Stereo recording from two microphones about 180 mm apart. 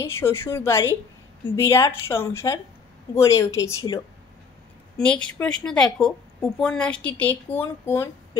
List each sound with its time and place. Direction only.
0.0 s a woman's voice: 15° left (ahead or behind)
4.9 s a woman's voice: 5° left (ahead or behind)